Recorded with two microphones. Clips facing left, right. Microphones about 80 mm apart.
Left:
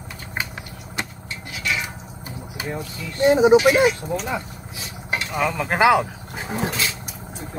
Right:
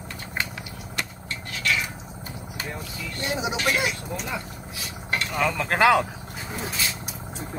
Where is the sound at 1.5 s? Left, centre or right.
Centre.